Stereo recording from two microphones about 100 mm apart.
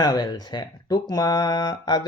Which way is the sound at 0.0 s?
40° left (ahead or behind).